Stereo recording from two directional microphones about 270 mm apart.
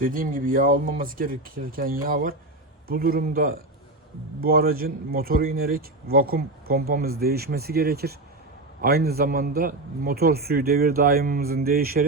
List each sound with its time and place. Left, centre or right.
0.0 s speech: right